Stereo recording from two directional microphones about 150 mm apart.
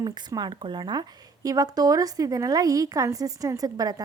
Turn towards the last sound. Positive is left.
turn(degrees=-25)  # may be behind; listen again after turning